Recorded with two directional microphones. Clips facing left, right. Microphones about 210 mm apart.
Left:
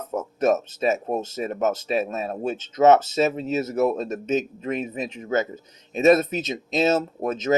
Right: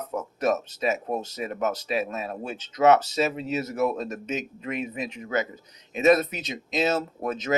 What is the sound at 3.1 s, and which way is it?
Speech, 45° left (ahead or behind).